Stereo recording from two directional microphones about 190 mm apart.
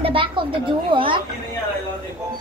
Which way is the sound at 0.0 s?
25° right (ahead or behind).